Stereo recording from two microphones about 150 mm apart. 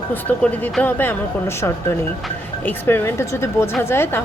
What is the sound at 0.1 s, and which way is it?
Speech, 10° left (ahead or behind).